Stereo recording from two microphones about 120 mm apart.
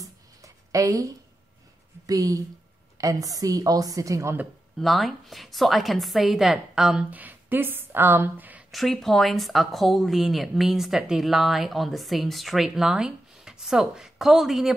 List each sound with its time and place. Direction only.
0.0 s a sound: 30° right (ahead or behind)
2.0 s a woman's voice: 30° right (ahead or behind)
4.7 s speech: centre (ahead or behind)
8.7 s speech: centre (ahead or behind)